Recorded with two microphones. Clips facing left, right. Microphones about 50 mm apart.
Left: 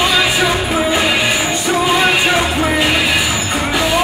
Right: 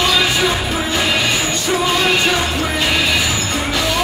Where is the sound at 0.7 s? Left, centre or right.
Centre.